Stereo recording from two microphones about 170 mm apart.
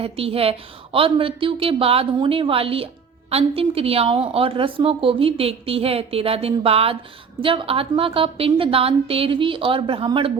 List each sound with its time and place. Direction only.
0.0 s speech: 35° right (ahead or behind)